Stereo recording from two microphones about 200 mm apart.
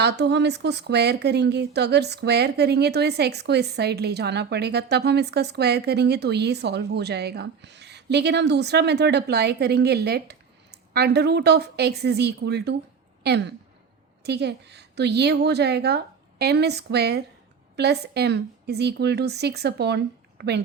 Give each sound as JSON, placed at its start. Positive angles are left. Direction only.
{"t": 0.0, "sound": "a woman's voice", "side_deg": -60}